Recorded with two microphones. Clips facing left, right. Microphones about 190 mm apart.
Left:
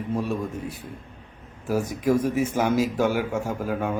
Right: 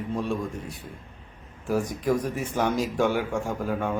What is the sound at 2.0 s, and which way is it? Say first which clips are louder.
A man's voice: left 4 dB; 10° left (ahead or behind).